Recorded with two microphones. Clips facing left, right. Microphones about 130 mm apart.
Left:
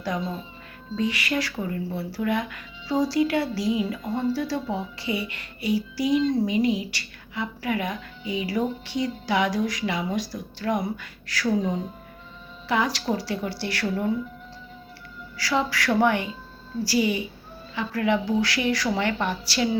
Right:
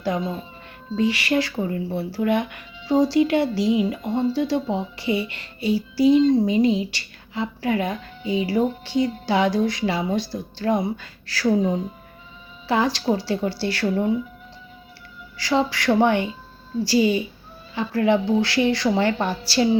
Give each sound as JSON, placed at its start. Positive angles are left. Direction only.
{"t": 0.9, "sound": "speech", "side_deg": -30}
{"t": 12.6, "sound": "speech", "side_deg": -30}
{"t": 15.4, "sound": "a woman's voice", "side_deg": -25}